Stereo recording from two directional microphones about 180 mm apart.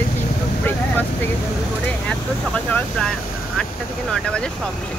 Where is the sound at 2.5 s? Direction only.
5° left (ahead or behind).